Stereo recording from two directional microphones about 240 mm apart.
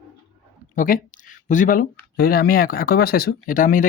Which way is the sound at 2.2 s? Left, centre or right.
Left.